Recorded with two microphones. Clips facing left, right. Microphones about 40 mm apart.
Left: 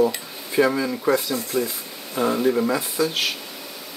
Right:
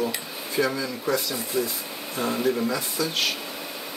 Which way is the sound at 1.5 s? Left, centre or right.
Centre.